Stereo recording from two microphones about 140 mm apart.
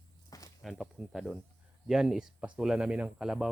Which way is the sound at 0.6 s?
Centre (ahead or behind).